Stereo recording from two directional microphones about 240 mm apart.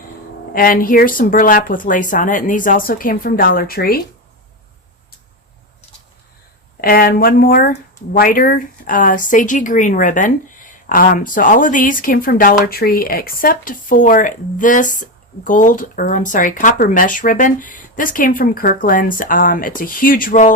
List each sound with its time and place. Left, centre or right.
0.5 s speech: left
6.8 s speech: left